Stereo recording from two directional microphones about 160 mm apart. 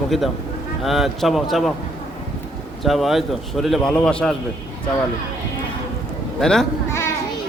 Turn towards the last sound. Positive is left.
turn(degrees=15)  # may be behind; listen again after turning